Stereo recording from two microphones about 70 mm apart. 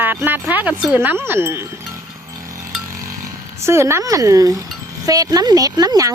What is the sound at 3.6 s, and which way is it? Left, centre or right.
Speech, right.